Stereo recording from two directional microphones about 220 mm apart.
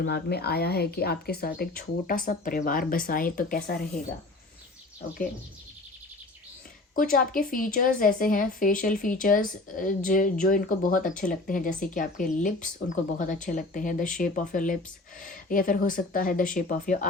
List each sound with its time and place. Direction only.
0.0 s speech: 50° left (ahead or behind)
6.9 s speech: 40° left (ahead or behind)